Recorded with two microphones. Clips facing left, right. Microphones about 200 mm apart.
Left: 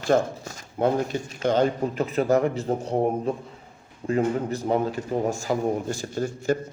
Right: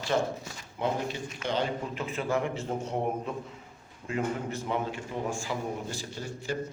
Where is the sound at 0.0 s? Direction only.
45° left (ahead or behind).